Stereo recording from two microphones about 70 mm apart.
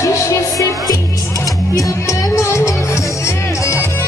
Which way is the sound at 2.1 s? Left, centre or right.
Left.